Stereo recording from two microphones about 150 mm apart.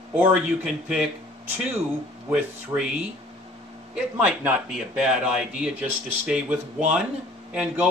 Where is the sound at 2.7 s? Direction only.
20° right (ahead or behind).